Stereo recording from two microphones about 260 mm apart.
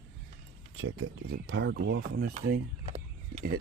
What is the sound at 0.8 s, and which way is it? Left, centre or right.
Speech, right.